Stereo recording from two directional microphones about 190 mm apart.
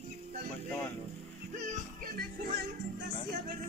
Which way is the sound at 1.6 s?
45° right (ahead or behind).